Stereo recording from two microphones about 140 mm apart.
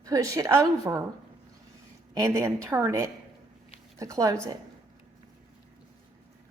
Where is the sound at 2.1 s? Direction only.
20° right (ahead or behind).